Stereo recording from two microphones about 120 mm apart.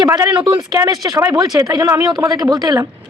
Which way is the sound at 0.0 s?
35° right (ahead or behind).